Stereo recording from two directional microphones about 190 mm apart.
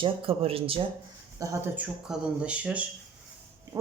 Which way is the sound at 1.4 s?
15° right (ahead or behind).